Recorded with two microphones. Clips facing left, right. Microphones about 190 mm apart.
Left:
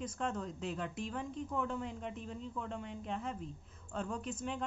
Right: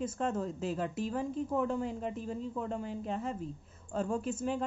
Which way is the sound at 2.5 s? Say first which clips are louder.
Right 6 dB; 35° right (ahead or behind).